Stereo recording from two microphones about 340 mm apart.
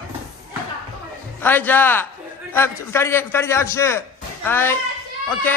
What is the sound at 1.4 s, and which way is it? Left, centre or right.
A man's voice, centre.